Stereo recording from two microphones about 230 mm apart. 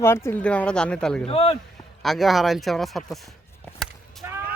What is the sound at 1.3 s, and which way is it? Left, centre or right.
Speech, left.